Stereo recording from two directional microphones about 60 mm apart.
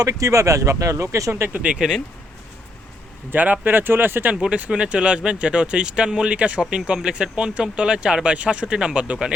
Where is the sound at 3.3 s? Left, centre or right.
Right.